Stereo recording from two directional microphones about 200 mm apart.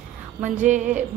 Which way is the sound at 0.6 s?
35° right (ahead or behind).